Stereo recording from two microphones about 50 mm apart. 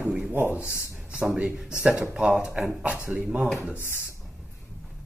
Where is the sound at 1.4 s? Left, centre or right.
Centre.